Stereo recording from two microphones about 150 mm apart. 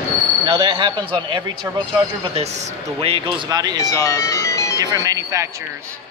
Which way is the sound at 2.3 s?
45° right (ahead or behind).